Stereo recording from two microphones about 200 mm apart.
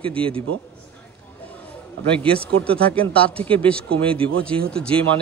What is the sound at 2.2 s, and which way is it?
Speech, 5° left (ahead or behind).